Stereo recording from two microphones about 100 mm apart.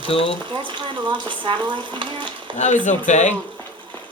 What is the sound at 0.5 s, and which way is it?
Stir, 55° right (ahead or behind).